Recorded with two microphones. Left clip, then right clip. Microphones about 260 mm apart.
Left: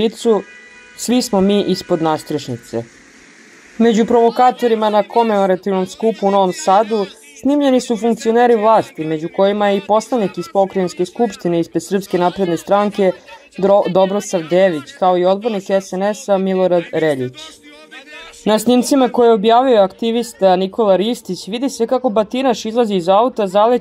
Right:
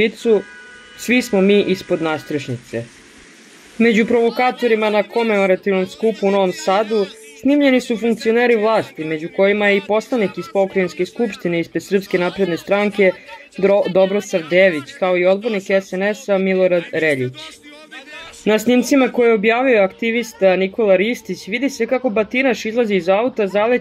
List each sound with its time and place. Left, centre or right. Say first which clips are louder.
0.0 s speech: even; left
4.3 s speech: left 3 dB; centre